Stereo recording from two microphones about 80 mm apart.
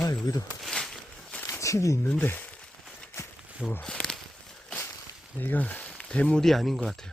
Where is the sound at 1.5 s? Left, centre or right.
Left.